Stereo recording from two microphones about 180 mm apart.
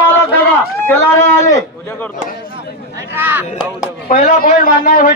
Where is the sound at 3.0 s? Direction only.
10° right (ahead or behind).